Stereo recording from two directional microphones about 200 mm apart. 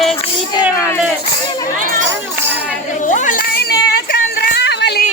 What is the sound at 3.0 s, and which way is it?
Speech, 40° left (ahead or behind).